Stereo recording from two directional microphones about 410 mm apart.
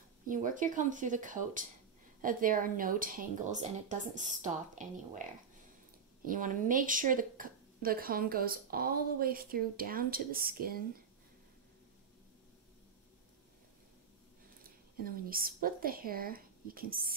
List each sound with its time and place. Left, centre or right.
0.3 s a woman's voice: centre
6.2 s a woman's voice: centre
14.6 s speech: right